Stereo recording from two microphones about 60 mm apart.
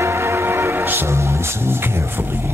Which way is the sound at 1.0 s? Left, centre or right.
Right.